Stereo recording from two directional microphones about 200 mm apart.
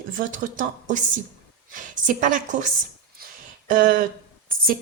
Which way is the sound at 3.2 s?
50° right (ahead or behind).